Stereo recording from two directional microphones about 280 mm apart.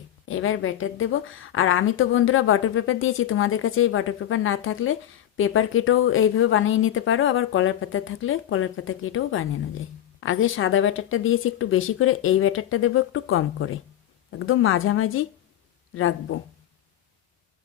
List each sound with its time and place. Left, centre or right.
0.3 s a woman's voice: left